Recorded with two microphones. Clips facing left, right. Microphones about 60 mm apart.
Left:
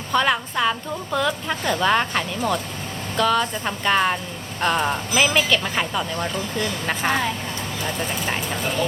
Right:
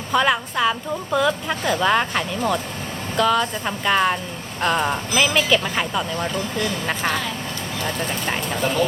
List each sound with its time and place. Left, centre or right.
0.1 s a woman's voice: centre